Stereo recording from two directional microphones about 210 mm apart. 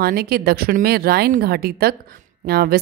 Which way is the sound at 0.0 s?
50° right (ahead or behind).